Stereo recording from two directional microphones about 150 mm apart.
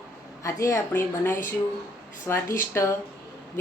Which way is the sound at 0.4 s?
20° left (ahead or behind).